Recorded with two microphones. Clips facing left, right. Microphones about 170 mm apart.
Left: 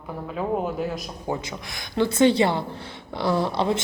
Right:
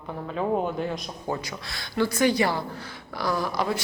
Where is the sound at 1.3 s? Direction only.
20° left (ahead or behind).